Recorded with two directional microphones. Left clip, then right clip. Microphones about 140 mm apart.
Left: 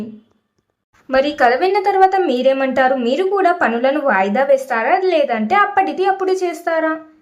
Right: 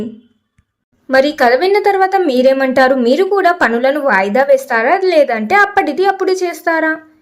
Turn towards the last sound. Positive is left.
turn(degrees=-35)  # may be behind; listen again after turning